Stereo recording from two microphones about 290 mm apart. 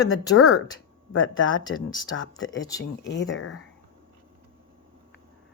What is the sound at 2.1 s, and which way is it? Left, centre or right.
Speech, left.